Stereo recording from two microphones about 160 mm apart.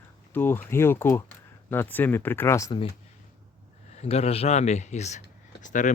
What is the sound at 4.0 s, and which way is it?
Speech, 40° left (ahead or behind).